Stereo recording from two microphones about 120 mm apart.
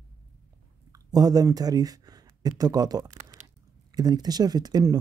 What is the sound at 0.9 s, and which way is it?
A woman's voice, 30° right (ahead or behind).